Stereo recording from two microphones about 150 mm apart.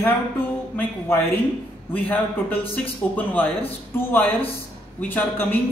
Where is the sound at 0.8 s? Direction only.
10° left (ahead or behind).